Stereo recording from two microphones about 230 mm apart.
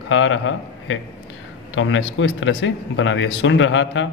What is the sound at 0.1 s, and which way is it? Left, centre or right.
A man's voice, left.